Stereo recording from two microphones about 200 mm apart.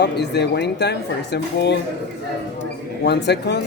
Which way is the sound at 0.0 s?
55° left (ahead or behind).